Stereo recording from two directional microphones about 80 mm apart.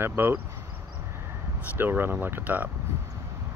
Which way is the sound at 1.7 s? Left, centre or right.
Right.